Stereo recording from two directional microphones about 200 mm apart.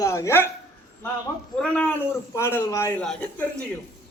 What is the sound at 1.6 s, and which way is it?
A man's voice, 5° left (ahead or behind).